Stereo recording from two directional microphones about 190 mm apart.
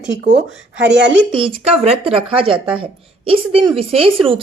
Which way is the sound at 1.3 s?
30° right (ahead or behind).